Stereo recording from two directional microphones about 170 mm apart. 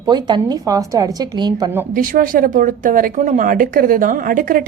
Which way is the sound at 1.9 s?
55° right (ahead or behind).